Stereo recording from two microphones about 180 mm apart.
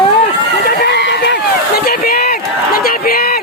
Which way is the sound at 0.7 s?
60° left (ahead or behind).